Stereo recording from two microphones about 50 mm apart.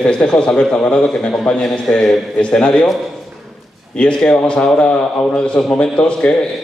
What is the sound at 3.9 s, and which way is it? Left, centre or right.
A man's voice, centre.